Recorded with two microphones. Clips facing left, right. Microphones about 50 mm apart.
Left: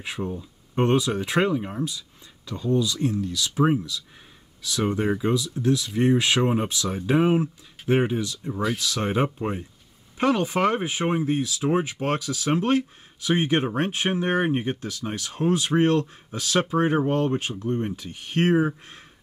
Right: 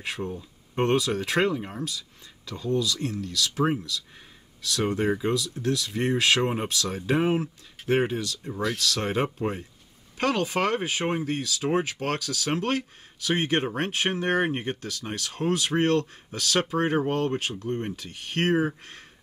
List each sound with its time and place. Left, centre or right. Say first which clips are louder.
0.0 s speech: left 2 dB; centre
2.6 s speech: left 3 dB; left
4.6 s speech: left 1 dB; centre
8.7 s speech: left 2 dB; centre
14.8 s speech: left 2 dB; left